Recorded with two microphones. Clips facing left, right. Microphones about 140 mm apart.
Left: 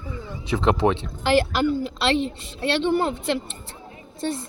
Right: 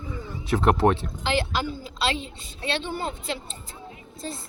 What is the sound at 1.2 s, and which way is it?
A woman's voice, 60° left (ahead or behind).